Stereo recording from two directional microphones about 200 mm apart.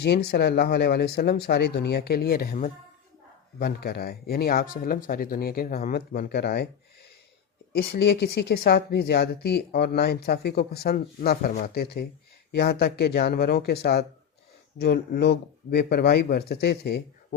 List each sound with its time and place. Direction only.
0.0 s speech: 55° left (ahead or behind)
7.7 s speech: 55° left (ahead or behind)